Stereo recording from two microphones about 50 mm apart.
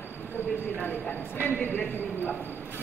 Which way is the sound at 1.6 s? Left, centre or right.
Left.